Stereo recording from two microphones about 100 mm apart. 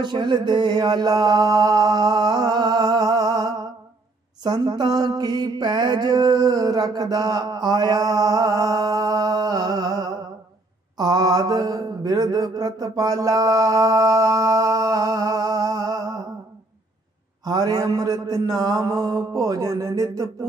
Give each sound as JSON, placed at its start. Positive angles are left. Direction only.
{"t": 0.0, "sound": "mantra", "side_deg": -45}
{"t": 17.5, "sound": "mantra", "side_deg": -40}